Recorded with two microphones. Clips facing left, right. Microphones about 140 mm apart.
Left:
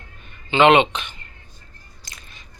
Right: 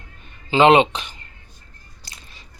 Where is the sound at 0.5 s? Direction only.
30° right (ahead or behind).